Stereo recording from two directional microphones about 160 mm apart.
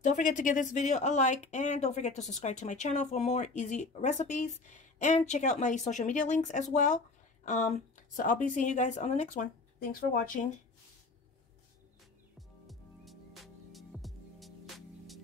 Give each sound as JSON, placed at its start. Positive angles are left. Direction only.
{"t": 0.0, "sound": "speech", "side_deg": 50}
{"t": 9.8, "sound": "speech", "side_deg": 65}
{"t": 12.4, "sound": "music", "side_deg": 0}